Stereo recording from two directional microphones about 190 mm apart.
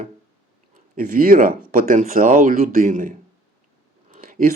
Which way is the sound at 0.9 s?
45° right (ahead or behind).